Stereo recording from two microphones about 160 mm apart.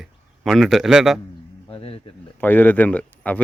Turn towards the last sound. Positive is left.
turn(degrees=10)  # may be behind; listen again after turning